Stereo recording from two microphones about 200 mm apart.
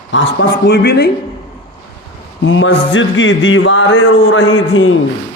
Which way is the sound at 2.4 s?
70° left (ahead or behind).